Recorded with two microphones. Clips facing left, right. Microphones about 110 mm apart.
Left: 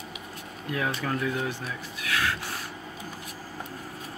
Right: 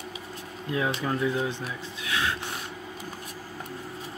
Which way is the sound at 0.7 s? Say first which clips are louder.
Right 2 dB; 20° right (ahead or behind).